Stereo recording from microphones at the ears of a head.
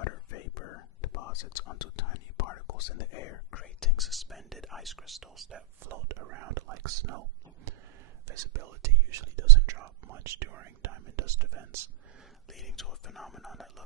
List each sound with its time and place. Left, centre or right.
0.0 s whispering: left
4.0 s whispering: centre
5.4 s whispering: right
13.0 s whispering: centre